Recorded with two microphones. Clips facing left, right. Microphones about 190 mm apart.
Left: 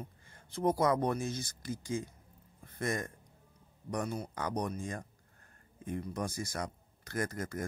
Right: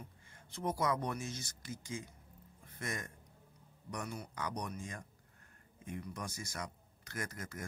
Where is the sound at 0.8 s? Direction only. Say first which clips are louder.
Left 4 dB; 55° left (ahead or behind).